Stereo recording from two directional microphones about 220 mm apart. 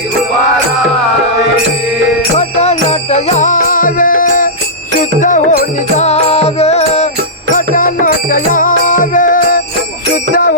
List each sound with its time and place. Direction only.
2.4 s music: 30° left (ahead or behind)